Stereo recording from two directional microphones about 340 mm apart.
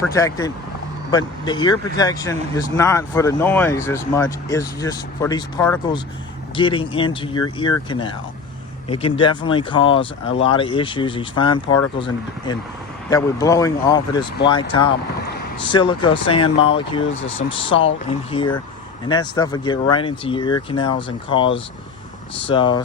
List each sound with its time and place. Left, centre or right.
0.0 s speech: centre